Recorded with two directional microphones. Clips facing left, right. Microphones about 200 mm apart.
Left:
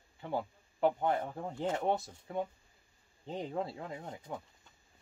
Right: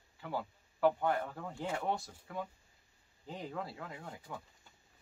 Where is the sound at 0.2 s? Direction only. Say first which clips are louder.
Left 3 dB; 25° left (ahead or behind).